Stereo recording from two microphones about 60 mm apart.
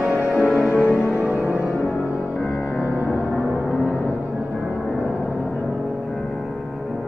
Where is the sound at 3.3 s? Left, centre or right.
Right.